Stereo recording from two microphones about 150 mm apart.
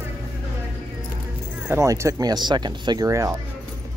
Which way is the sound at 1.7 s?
20° right (ahead or behind).